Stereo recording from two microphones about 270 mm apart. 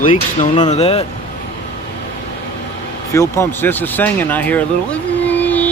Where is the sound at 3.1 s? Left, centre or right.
Centre.